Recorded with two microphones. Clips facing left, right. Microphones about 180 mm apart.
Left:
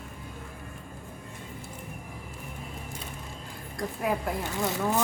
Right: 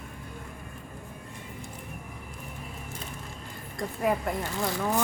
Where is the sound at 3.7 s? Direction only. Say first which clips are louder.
Right 2 dB; centre (ahead or behind).